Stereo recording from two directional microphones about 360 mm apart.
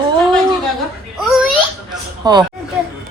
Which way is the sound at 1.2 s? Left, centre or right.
Centre.